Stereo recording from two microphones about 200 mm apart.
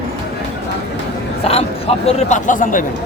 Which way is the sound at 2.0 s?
40° left (ahead or behind).